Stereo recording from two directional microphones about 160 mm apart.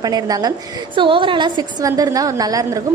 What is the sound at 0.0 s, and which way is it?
A woman's voice, 25° right (ahead or behind).